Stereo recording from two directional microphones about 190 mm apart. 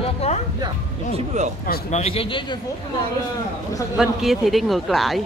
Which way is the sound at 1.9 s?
30° left (ahead or behind).